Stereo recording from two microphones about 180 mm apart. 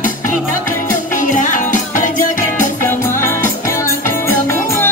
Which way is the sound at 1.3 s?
45° left (ahead or behind).